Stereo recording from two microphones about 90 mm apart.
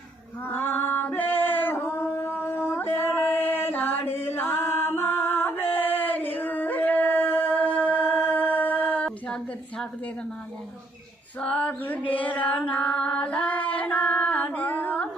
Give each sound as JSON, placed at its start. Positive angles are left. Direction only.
{"t": 0.4, "sound": "female singing", "side_deg": 20}
{"t": 2.6, "sound": "chant", "side_deg": 25}
{"t": 11.3, "sound": "female singing", "side_deg": 15}